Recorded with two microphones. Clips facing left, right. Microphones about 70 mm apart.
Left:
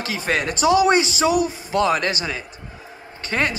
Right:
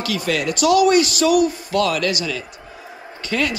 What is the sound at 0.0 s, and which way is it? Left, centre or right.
Speech, left.